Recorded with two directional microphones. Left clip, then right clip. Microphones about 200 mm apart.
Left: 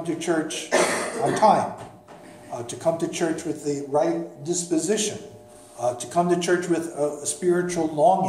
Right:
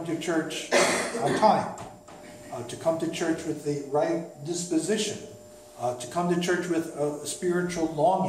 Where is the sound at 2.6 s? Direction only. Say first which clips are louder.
Left 3 dB; 55° left (ahead or behind).